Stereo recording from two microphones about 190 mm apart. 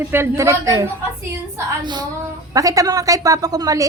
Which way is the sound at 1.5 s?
20° right (ahead or behind).